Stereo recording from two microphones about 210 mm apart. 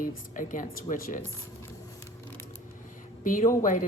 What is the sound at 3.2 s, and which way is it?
Speech, 40° left (ahead or behind).